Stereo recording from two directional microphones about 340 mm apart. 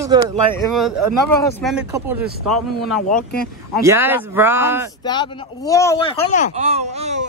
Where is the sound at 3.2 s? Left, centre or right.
Left.